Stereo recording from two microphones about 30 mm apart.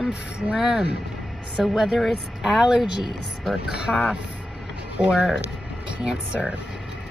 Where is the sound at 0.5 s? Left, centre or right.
Centre.